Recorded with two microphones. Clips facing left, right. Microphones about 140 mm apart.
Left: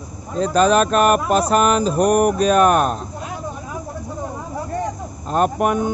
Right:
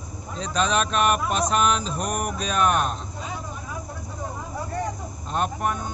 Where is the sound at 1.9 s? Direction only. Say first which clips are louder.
Left 12 dB; 60° left (ahead or behind).